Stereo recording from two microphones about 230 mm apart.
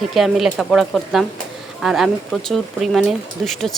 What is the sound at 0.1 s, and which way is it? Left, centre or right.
Speech, centre.